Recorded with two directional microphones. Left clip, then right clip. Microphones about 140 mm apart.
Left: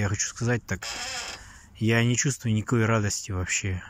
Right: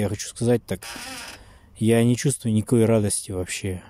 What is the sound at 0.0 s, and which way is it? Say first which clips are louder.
Speech: right 4 dB; 35° right (ahead or behind).